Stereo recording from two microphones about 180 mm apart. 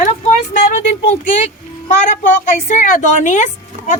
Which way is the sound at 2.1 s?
45° left (ahead or behind).